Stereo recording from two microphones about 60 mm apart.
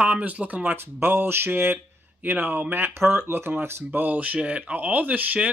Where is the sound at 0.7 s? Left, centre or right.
Right.